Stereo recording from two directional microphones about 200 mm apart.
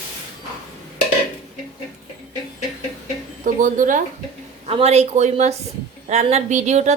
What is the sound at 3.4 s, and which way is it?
A woman's voice, 40° right (ahead or behind).